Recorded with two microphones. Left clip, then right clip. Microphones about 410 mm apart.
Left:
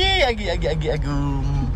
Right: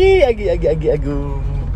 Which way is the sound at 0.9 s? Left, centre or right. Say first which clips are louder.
Right 8 dB; left.